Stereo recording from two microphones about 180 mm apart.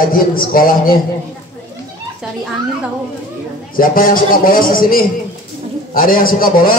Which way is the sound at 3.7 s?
50° left (ahead or behind).